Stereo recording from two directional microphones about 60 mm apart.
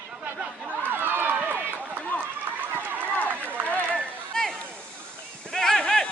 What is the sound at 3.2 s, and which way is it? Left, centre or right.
Run, left.